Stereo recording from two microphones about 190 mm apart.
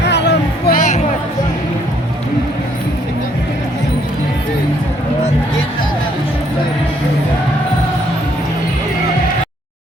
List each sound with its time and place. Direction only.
0.1 s music: 65° left (ahead or behind)